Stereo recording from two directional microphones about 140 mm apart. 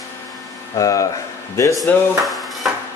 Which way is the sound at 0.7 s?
25° left (ahead or behind).